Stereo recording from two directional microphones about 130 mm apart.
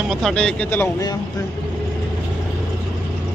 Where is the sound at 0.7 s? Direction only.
20° left (ahead or behind).